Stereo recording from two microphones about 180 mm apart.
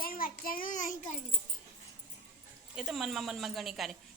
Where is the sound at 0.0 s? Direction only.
55° left (ahead or behind).